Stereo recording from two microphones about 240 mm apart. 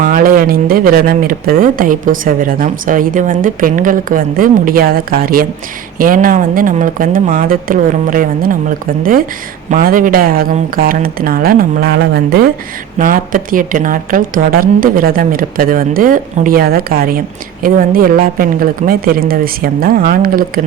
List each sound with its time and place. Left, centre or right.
0.0 s a woman's voice: right
9.6 s a woman's voice: right